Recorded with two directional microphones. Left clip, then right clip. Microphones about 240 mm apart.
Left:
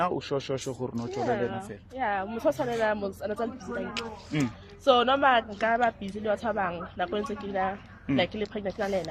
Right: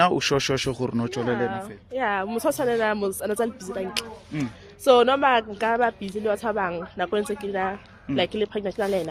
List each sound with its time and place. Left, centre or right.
0.0 s a woman's voice: right